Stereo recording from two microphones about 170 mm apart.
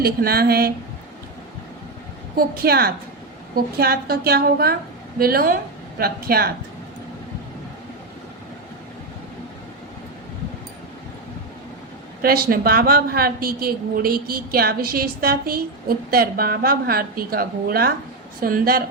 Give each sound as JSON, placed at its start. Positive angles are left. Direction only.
{"t": 0.0, "sound": "a man's voice", "side_deg": -65}
{"t": 2.6, "sound": "a man's voice", "side_deg": -65}
{"t": 12.2, "sound": "a man's voice", "side_deg": -60}